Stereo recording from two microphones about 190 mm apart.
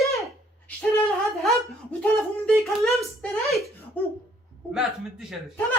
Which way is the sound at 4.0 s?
10° left (ahead or behind).